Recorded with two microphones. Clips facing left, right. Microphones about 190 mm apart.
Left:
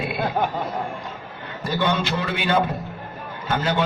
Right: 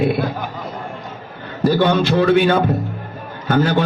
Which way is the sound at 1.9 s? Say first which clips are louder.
Right 9 dB; 55° right (ahead or behind).